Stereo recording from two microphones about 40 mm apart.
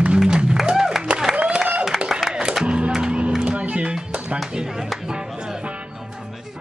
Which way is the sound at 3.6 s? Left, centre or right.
Right.